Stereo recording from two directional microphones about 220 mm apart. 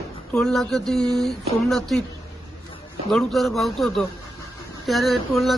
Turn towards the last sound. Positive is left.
turn(degrees=0)  # may be behind; listen again after turning